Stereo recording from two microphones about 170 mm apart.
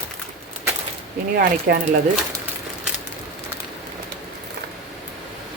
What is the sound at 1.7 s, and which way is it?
Speech, 60° right (ahead or behind).